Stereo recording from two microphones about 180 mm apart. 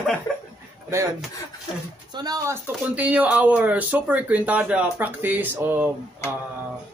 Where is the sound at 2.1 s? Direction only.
20° right (ahead or behind).